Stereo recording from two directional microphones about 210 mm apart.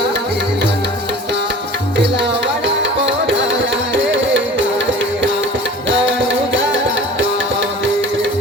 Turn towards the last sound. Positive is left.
turn(degrees=-60)  # may be behind; listen again after turning